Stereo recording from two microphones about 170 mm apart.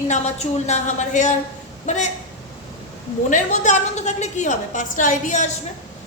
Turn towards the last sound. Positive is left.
turn(degrees=45)  # may be behind; listen again after turning